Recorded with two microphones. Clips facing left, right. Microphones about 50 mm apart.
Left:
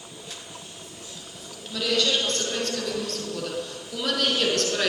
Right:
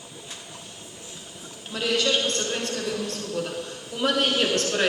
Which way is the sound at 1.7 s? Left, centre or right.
Right.